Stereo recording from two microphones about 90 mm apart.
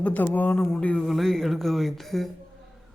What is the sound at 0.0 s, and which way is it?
A man's voice, 15° left (ahead or behind).